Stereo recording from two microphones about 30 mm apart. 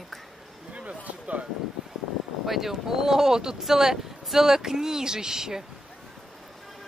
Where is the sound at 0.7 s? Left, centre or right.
Right.